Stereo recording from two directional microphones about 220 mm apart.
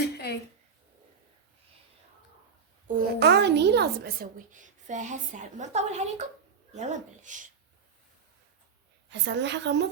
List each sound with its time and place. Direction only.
2.8 s a child's voice: 50° right (ahead or behind)
9.0 s a woman's voice: 50° right (ahead or behind)